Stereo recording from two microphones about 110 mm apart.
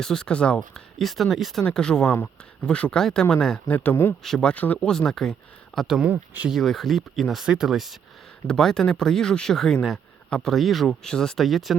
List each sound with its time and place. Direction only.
0.0 s speech: 5° left (ahead or behind)
4.2 s speech: 5° left (ahead or behind); by 6.5 s 15° right (ahead or behind)
6.5 s speech: centre (ahead or behind)